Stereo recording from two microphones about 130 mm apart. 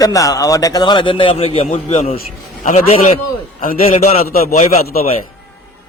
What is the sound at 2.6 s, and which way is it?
Speech, 70° left (ahead or behind).